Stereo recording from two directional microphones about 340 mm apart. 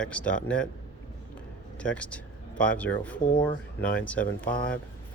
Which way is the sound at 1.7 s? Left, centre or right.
Centre.